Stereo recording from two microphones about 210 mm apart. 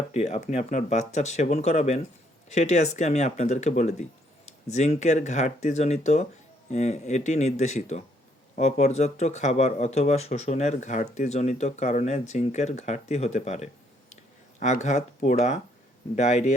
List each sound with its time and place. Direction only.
0.1 s speech: 30° left (ahead or behind)